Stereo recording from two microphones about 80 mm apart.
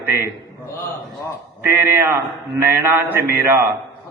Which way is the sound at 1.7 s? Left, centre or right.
Right.